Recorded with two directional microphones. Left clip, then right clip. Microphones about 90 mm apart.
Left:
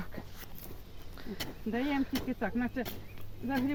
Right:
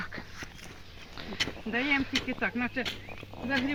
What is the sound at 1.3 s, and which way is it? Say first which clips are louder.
Speech: right 6 dB; 85° left.